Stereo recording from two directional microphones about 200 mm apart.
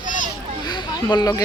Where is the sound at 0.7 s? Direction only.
20° left (ahead or behind).